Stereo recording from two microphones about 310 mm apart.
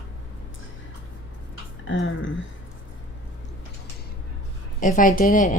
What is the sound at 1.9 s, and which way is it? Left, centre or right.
Speech, left.